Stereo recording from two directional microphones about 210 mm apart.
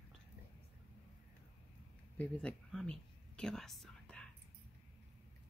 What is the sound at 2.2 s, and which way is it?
Speech, 5° left (ahead or behind).